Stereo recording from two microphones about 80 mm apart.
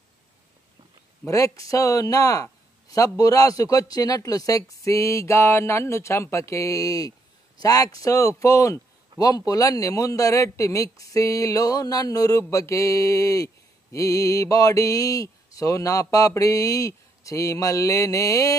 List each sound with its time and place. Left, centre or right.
1.2 s speech: left
9.1 s a sound: right
9.5 s speech: left